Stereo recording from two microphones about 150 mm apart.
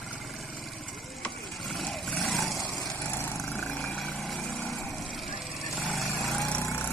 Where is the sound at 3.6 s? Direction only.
Centre (ahead or behind).